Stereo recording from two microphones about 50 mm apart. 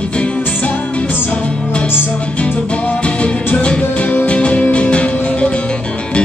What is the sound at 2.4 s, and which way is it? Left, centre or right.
Music, left.